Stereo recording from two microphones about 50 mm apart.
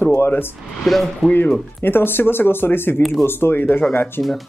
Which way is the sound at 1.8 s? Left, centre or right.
Left.